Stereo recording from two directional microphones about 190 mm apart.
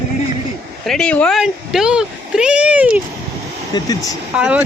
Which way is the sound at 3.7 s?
20° left (ahead or behind).